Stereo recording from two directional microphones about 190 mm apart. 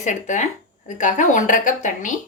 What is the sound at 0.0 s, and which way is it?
Speech, 40° left (ahead or behind).